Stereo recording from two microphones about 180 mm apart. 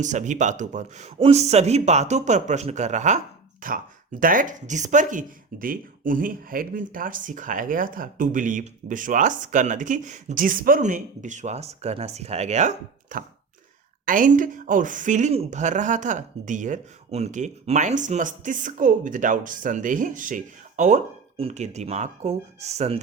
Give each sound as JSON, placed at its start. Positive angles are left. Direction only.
{"t": 0.0, "sound": "a man's voice", "side_deg": -40}